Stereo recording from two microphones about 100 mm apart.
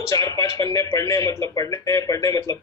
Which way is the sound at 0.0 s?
30° left (ahead or behind).